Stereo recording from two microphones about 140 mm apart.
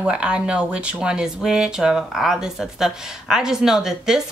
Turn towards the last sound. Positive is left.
turn(degrees=-5)  # may be behind; listen again after turning